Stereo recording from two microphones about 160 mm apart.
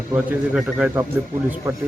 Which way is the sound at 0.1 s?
10° right (ahead or behind).